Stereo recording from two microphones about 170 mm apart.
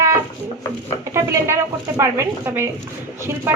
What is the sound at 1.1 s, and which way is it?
Speech, 15° right (ahead or behind).